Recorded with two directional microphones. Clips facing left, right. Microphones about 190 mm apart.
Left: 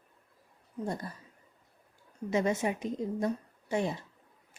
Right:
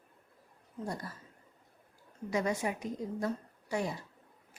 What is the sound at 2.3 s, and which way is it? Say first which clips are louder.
Speech: left 3 dB; 25° left (ahead or behind).